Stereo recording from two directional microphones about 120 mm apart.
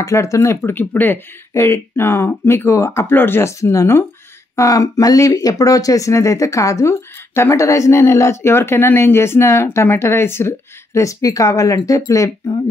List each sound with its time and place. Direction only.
0.0 s speech: 25° left (ahead or behind)